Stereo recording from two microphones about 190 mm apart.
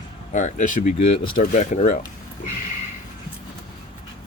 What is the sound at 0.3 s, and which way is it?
Speech, 40° left (ahead or behind).